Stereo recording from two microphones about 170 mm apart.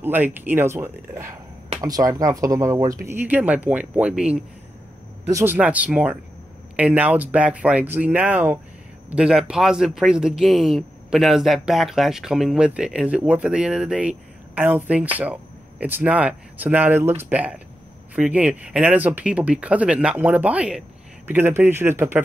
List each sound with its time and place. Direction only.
0.0 s speech: 10° right (ahead or behind)